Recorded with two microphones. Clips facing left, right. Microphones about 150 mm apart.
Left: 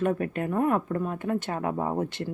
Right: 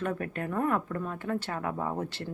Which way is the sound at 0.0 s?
20° left (ahead or behind).